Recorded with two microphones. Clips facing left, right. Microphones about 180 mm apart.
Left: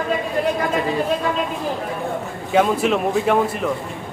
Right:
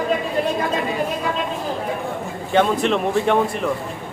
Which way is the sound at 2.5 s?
5° left (ahead or behind).